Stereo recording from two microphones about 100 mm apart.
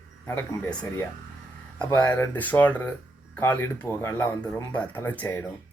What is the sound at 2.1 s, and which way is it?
Speech, 20° left (ahead or behind).